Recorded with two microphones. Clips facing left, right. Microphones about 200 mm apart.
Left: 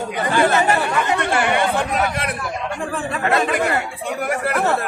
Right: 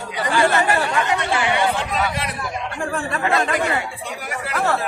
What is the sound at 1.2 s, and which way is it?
Speech, 55° left (ahead or behind).